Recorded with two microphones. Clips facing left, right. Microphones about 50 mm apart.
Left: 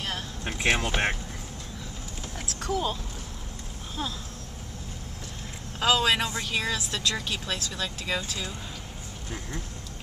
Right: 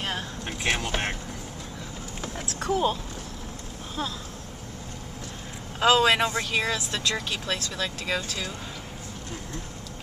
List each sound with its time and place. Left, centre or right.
0.5 s speech: centre
2.3 s a sound: right
5.8 s speech: centre